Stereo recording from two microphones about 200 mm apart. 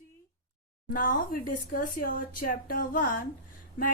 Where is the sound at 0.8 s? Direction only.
45° left (ahead or behind).